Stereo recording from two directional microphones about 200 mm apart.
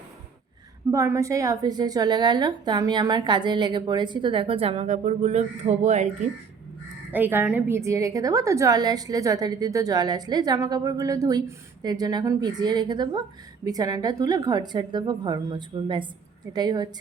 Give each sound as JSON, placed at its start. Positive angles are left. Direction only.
{"t": 0.9, "sound": "a woman's voice", "side_deg": -15}
{"t": 7.1, "sound": "a woman's voice", "side_deg": -10}